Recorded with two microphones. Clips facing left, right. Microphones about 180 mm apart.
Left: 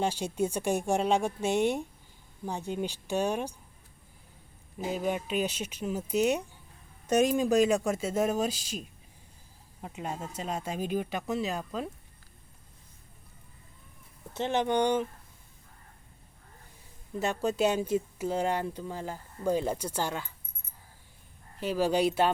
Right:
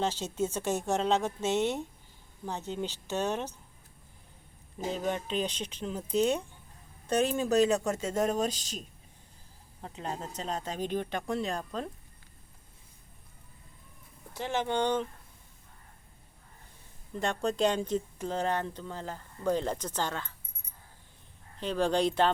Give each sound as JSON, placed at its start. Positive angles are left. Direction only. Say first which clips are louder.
{"t": 0.0, "sound": "speech", "louder": "left 2 dB", "side_deg": 15}
{"t": 4.9, "sound": "speech", "louder": "left 1 dB", "side_deg": 10}
{"t": 9.8, "sound": "speech", "louder": "left 1 dB", "side_deg": 10}
{"t": 14.3, "sound": "speech", "louder": "left 3 dB", "side_deg": 20}
{"t": 17.2, "sound": "speech", "louder": "left 1 dB", "side_deg": 5}
{"t": 21.6, "sound": "speech", "louder": "left 1 dB", "side_deg": 5}